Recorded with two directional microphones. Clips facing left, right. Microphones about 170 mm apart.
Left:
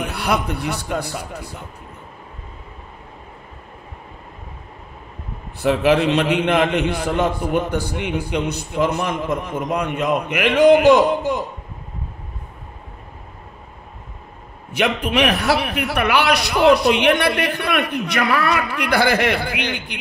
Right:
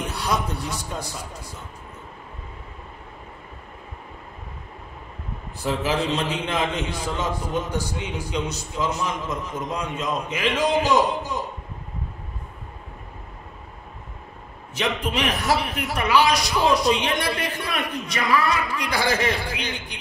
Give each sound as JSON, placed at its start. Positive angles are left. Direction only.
{"t": 0.0, "sound": "a man's voice", "side_deg": 65}
{"t": 5.6, "sound": "a man's voice", "side_deg": 70}
{"t": 14.7, "sound": "a man's voice", "side_deg": 70}